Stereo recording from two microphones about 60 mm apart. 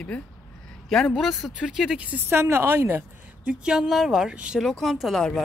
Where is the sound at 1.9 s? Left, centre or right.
Right.